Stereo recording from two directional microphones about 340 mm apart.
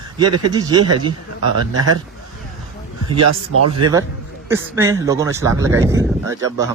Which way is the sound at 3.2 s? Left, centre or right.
Right.